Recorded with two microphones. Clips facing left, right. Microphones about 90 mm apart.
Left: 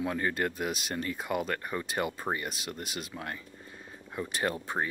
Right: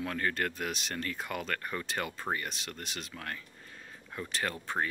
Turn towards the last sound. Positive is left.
turn(degrees=15)  # may be behind; listen again after turning